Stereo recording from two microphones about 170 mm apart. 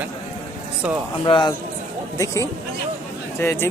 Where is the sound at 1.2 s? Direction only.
25° left (ahead or behind).